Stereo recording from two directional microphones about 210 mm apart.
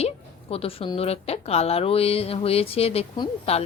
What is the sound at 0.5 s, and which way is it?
A woman's voice, 25° left (ahead or behind).